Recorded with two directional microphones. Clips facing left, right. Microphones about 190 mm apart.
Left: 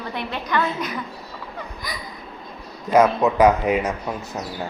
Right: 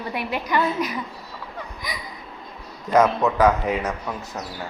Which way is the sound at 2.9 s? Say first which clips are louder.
Left 2 dB; 10° left (ahead or behind).